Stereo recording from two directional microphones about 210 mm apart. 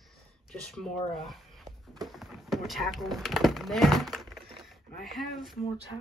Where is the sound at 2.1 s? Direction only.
Centre (ahead or behind).